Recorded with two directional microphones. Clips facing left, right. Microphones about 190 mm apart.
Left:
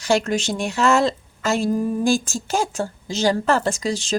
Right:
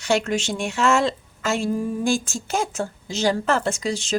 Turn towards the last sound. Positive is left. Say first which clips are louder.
# left 2 dB
turn(degrees=35)  # may be behind; listen again after turning